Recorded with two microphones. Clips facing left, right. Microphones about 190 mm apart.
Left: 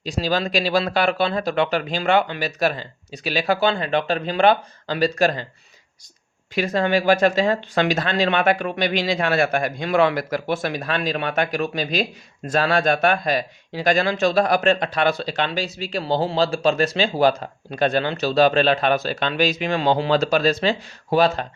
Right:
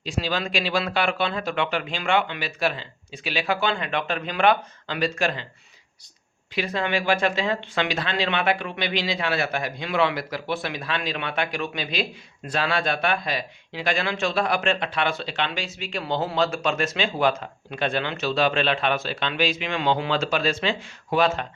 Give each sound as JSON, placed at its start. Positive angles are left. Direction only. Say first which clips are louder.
{"t": 0.0, "sound": "speech", "louder": "left 4 dB", "side_deg": 40}
{"t": 6.5, "sound": "speech", "louder": "left 6 dB", "side_deg": 45}